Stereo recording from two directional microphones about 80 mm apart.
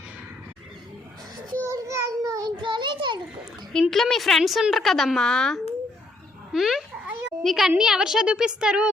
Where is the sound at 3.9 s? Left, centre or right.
Centre.